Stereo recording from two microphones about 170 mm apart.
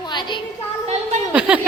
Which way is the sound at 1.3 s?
10° right (ahead or behind).